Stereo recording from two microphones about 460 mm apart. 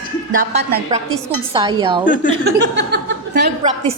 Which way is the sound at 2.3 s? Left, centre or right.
Right.